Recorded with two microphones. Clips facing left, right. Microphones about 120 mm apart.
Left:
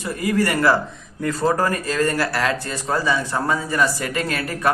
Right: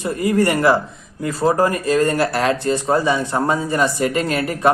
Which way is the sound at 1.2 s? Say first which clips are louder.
Right 3 dB; 10° right (ahead or behind).